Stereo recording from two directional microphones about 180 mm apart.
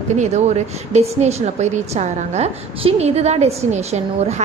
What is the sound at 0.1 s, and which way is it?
Speech, 40° right (ahead or behind).